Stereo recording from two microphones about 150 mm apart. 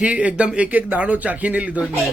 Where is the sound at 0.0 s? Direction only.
10° right (ahead or behind).